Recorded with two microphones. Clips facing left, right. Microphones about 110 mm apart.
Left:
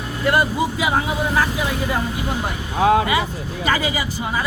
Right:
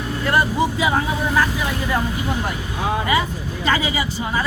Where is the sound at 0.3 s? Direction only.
15° left (ahead or behind).